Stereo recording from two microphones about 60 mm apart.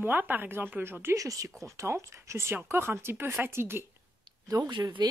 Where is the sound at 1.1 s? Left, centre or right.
Right.